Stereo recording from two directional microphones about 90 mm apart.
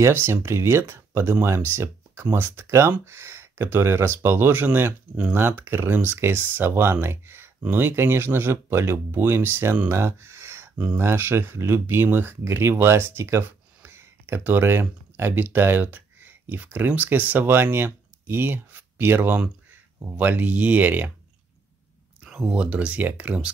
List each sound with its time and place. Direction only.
0.0 s speech: 30° right (ahead or behind)
22.2 s speech: 10° right (ahead or behind)